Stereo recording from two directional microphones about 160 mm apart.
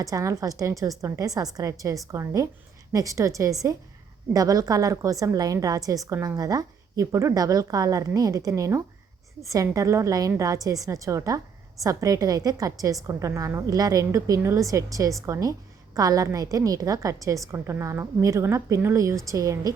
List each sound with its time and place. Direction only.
0.0 s a woman's voice: 20° right (ahead or behind)